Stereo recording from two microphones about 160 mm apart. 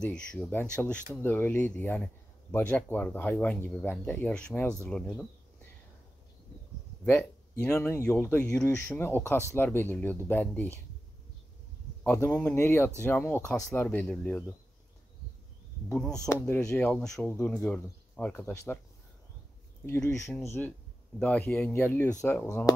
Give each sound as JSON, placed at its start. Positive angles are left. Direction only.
{"t": 0.0, "sound": "speech", "side_deg": 5}
{"t": 7.1, "sound": "speech", "side_deg": 10}
{"t": 12.0, "sound": "speech", "side_deg": 10}
{"t": 16.4, "sound": "speech", "side_deg": 15}
{"t": 19.9, "sound": "speech", "side_deg": 20}